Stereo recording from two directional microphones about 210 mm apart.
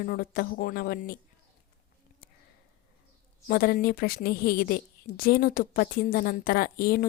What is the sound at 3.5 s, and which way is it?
A woman's voice, 45° left (ahead or behind).